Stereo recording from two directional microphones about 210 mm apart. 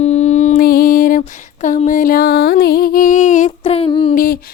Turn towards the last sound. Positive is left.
turn(degrees=40)  # may be behind; listen again after turning